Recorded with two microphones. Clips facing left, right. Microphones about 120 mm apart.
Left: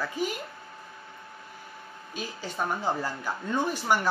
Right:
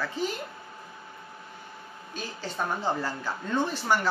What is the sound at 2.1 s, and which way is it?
A woman's voice, 10° left (ahead or behind).